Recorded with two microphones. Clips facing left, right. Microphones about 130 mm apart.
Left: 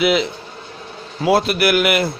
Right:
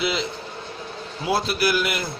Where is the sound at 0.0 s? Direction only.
65° left (ahead or behind).